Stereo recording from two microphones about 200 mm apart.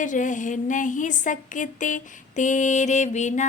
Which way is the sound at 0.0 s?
40° left (ahead or behind).